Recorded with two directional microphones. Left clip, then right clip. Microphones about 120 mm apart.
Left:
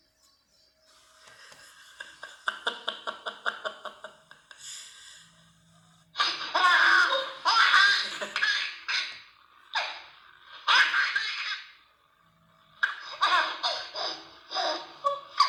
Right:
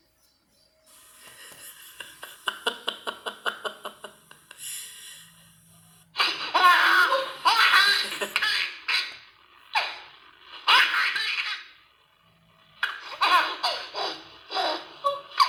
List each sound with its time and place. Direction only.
1.2 s a sound: 25° right (ahead or behind)
6.1 s laughter: 25° right (ahead or behind)
10.5 s laughter: 25° right (ahead or behind)
12.8 s baby laughter: 30° right (ahead or behind)